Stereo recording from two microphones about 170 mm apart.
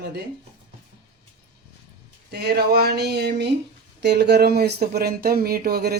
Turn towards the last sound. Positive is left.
turn(degrees=-70)  # may be behind; listen again after turning